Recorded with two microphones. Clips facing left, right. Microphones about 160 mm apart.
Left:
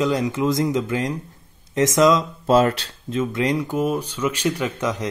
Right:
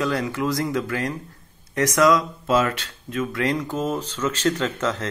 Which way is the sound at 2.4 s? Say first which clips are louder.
Left 7 dB; 35° left (ahead or behind).